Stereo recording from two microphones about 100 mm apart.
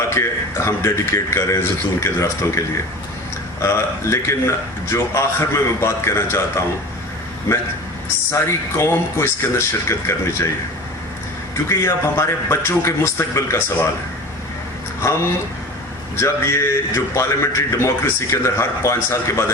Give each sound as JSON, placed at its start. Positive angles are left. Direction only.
{"t": 0.1, "sound": "a man's voice", "side_deg": 25}
{"t": 11.7, "sound": "a man's voice", "side_deg": 30}
{"t": 15.0, "sound": "a man's voice", "side_deg": 30}